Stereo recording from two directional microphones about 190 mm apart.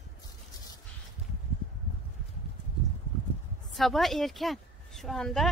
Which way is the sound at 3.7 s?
Centre (ahead or behind).